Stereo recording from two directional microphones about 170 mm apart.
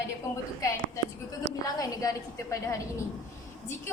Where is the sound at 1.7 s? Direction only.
20° left (ahead or behind).